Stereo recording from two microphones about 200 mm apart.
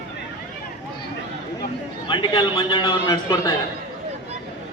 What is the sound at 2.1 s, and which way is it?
A man's voice, 25° left (ahead or behind).